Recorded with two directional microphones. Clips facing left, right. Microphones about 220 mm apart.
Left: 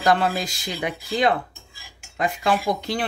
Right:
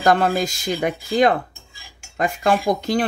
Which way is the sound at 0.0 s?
50° right (ahead or behind).